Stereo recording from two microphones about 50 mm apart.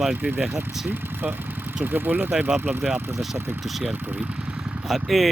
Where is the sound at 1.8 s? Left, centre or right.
Right.